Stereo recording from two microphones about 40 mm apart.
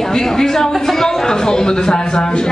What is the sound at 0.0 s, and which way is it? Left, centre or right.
Speech, centre.